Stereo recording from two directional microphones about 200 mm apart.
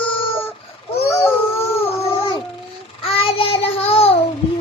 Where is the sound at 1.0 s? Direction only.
10° left (ahead or behind).